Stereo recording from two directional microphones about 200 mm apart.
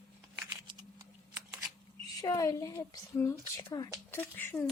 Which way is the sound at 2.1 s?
15° left (ahead or behind).